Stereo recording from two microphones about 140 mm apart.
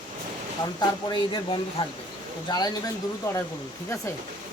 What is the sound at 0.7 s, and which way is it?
Speech, 35° left (ahead or behind).